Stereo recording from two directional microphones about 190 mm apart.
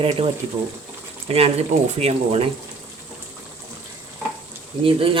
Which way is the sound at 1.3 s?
30° right (ahead or behind).